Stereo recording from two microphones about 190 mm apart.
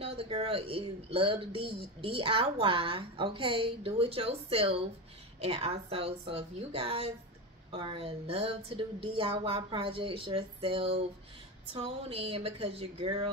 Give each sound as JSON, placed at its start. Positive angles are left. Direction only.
{"t": 0.0, "sound": "a woman's voice", "side_deg": -30}